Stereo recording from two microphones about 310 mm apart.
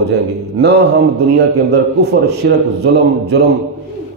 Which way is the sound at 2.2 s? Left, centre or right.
Right.